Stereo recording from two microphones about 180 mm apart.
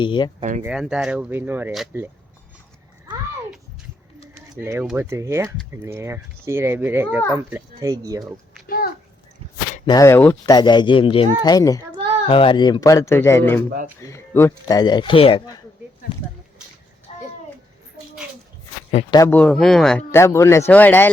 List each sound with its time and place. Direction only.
0.0 s speech: 25° left (ahead or behind)
0.6 s speech: 5° right (ahead or behind)
4.6 s speech: 15° right (ahead or behind)
8.6 s a sound: 55° left (ahead or behind)
9.8 s speech: 20° left (ahead or behind)
10.5 s speech: 25° left (ahead or behind)
17.1 s a sound: 35° left (ahead or behind)
19.1 s speech: 15° left (ahead or behind)